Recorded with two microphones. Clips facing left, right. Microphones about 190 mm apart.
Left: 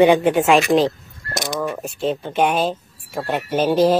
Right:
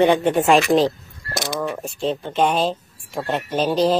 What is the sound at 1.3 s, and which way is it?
Speech, 20° left (ahead or behind).